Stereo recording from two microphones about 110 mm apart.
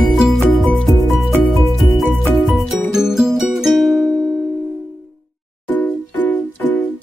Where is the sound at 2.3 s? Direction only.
5° right (ahead or behind).